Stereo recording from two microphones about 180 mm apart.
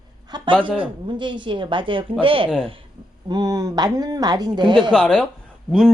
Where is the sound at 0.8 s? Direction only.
25° right (ahead or behind).